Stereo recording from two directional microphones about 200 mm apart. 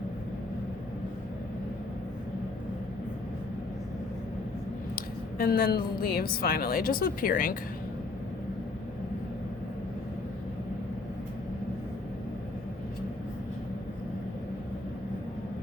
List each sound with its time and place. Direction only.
4.9 s a woman's voice: 45° left (ahead or behind)